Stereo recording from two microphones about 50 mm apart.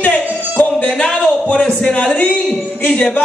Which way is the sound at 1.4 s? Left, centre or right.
Centre.